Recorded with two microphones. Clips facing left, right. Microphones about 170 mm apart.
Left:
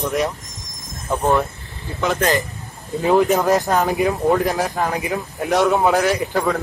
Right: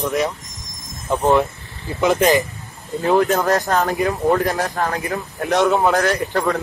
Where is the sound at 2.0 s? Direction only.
20° right (ahead or behind).